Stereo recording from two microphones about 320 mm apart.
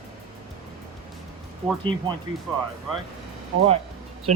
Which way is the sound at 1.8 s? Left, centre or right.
Centre.